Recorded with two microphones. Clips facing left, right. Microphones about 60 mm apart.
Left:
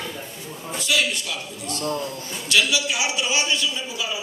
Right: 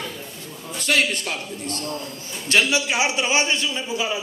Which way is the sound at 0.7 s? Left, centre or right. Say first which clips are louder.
Right 2 dB; right.